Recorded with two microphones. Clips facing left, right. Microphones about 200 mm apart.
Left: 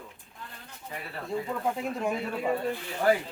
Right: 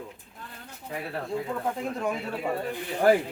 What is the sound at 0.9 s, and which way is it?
Speech, 65° right (ahead or behind).